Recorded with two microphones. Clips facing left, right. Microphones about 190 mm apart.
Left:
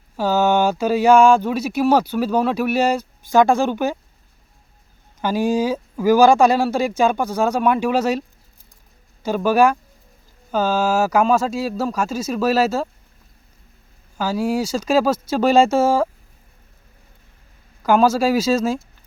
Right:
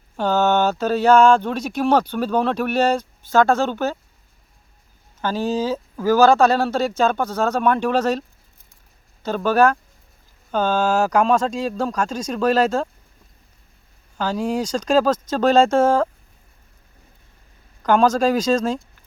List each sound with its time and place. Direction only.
0.2 s speech: 10° left (ahead or behind)
5.2 s speech: 10° left (ahead or behind)
9.2 s speech: 10° left (ahead or behind)
14.2 s speech: 5° left (ahead or behind)
17.8 s speech: 5° left (ahead or behind)